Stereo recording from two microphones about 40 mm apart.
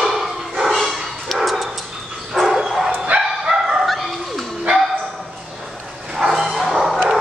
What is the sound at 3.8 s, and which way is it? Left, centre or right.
Dog, centre.